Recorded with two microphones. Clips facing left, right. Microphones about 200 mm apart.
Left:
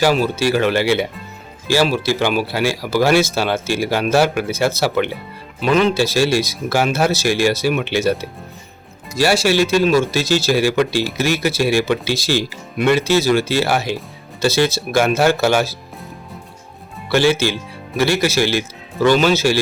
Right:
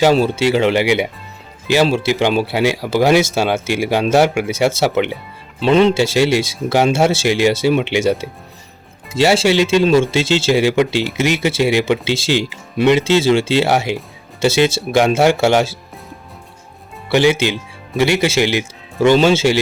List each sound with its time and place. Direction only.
0.0 s speech: 25° right (ahead or behind)
17.1 s speech: 20° right (ahead or behind)